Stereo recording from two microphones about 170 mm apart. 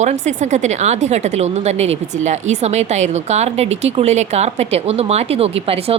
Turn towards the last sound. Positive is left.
turn(degrees=-35)  # may be behind; listen again after turning